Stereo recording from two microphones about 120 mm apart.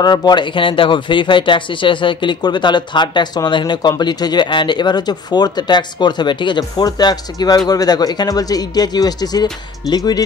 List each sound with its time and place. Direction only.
0.0 s speech: 35° left (ahead or behind)